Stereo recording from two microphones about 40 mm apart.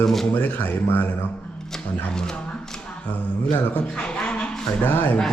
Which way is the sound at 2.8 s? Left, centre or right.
Left.